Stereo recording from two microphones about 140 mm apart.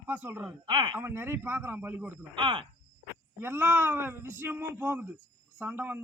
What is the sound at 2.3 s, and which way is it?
Cricket, 35° right (ahead or behind).